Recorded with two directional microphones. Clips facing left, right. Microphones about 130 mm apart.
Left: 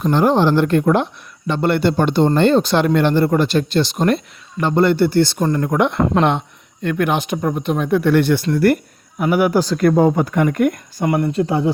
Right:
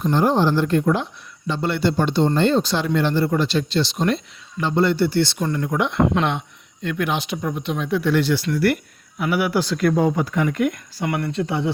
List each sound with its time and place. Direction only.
0.0 s a man's voice: 75° left (ahead or behind); by 11.7 s 40° left (ahead or behind)